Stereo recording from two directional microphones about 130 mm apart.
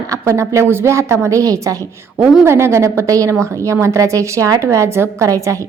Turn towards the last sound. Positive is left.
turn(degrees=-25)  # may be behind; listen again after turning